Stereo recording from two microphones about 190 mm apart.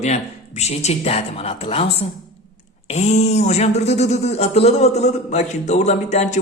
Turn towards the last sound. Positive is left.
turn(degrees=35)  # may be behind; listen again after turning